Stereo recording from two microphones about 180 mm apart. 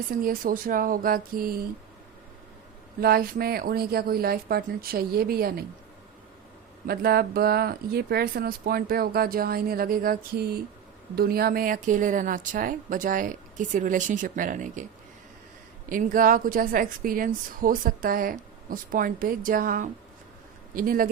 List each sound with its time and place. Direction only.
0.1 s a woman's voice: 50° right (ahead or behind)
3.0 s speech: 55° right (ahead or behind)
6.8 s a woman's voice: 60° right (ahead or behind)
15.9 s a woman's voice: 50° right (ahead or behind)